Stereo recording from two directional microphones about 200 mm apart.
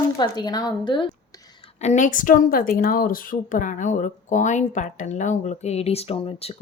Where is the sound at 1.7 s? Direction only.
35° left (ahead or behind).